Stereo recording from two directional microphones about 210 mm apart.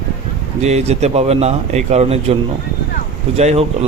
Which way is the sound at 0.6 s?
30° right (ahead or behind).